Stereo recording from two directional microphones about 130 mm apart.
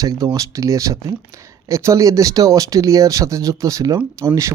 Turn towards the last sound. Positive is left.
turn(degrees=-25)  # may be behind; listen again after turning